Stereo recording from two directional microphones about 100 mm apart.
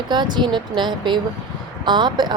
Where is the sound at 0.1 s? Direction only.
50° right (ahead or behind).